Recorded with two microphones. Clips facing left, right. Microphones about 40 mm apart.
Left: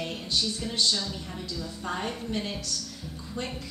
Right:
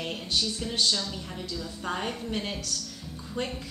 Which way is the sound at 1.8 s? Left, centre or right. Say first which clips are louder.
Right 1 dB; centre.